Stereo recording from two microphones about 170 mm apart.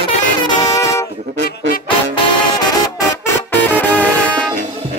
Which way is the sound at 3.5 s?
10° left (ahead or behind).